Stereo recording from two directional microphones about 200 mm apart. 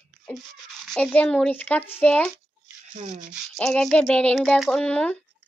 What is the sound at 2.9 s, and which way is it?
Speech, 35° right (ahead or behind).